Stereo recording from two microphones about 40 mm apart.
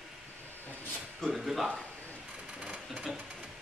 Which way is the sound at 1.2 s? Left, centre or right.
Centre.